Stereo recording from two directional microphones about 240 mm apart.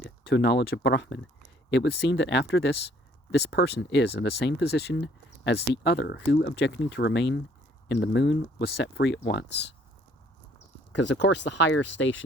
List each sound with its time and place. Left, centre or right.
0.0 s speech: left
10.9 s speech: left